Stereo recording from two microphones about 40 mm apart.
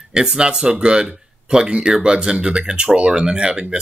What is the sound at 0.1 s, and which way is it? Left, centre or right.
Speech, right.